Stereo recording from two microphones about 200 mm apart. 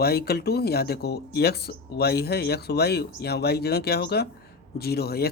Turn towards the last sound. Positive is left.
turn(degrees=50)  # may be behind; listen again after turning